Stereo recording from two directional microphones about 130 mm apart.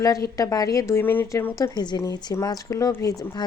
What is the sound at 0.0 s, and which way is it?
Speech, 25° left (ahead or behind).